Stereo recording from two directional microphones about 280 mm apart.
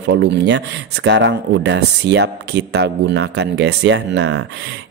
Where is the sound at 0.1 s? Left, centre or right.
Right.